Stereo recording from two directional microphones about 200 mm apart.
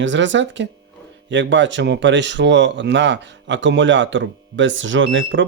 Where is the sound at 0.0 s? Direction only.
65° right (ahead or behind).